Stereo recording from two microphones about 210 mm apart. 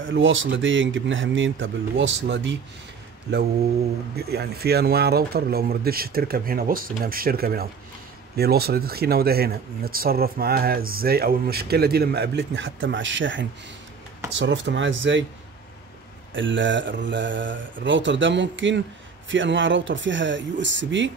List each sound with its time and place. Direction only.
0.0 s speech: 65° right (ahead or behind)
4.2 s speech: 50° right (ahead or behind)
16.3 s speech: 60° right (ahead or behind)